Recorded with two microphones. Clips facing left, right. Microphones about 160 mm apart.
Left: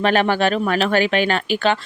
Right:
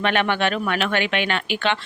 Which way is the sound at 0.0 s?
35° left (ahead or behind).